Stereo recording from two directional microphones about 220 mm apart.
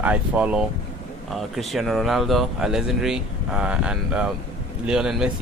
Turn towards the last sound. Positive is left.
turn(degrees=-5)  # may be behind; listen again after turning